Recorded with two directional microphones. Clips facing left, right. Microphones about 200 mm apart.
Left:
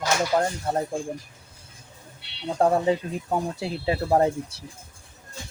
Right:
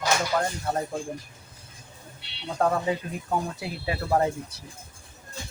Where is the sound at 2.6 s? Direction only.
30° left (ahead or behind).